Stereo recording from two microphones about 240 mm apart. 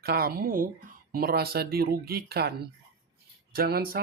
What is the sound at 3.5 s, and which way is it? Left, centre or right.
Speech, right.